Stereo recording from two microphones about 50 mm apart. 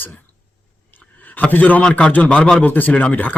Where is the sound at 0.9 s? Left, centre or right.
Left.